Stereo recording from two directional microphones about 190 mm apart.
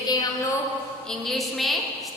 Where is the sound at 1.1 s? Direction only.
Centre (ahead or behind).